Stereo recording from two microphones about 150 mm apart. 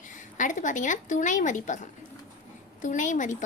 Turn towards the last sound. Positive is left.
turn(degrees=55)  # may be behind; listen again after turning